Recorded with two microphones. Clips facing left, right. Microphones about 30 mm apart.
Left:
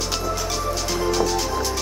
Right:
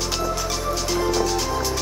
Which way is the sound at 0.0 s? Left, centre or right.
Centre.